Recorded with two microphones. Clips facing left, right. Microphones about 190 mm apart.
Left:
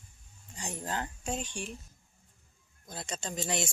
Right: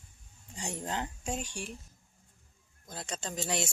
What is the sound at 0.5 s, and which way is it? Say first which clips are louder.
Speech: even; 25° right (ahead or behind).